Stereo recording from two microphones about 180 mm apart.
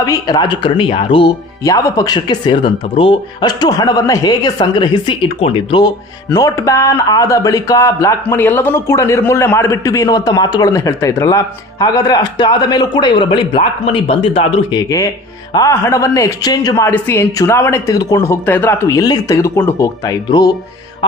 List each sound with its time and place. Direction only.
0.0 s speech: 20° left (ahead or behind)
14.7 s a woman's voice: 20° left (ahead or behind)